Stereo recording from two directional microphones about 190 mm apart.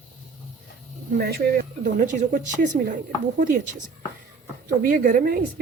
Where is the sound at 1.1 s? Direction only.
55° right (ahead or behind).